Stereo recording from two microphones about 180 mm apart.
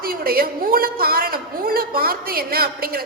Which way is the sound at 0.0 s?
55° right (ahead or behind).